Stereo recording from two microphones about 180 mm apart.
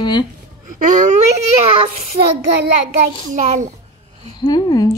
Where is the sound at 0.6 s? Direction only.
45° right (ahead or behind).